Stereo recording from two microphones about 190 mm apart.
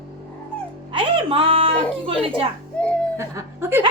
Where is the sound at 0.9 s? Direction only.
30° right (ahead or behind).